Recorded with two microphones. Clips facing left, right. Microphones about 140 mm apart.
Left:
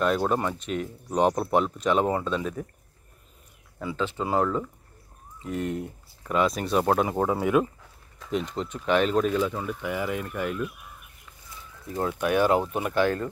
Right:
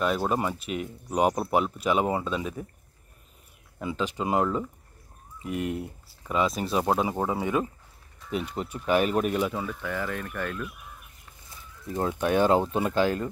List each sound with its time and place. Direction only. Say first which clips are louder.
0.0 s speech: left 2 dB; centre (ahead or behind)
3.8 s speech: even; 15° right (ahead or behind)
9.7 s speech: left 3 dB; 15° left (ahead or behind)
11.9 s speech: even; 15° right (ahead or behind)